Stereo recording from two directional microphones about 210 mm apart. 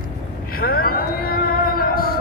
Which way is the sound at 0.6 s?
45° left (ahead or behind).